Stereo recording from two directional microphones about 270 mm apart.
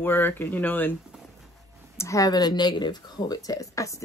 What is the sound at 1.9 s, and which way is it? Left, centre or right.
A woman's voice, centre.